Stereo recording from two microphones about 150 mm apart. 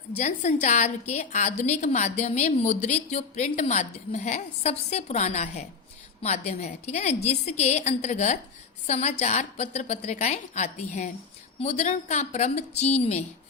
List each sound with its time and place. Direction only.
0.2 s a woman's voice: 50° left (ahead or behind)